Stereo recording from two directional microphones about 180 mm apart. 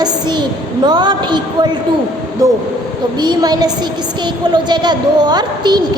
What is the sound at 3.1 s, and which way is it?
A woman's voice, 25° right (ahead or behind).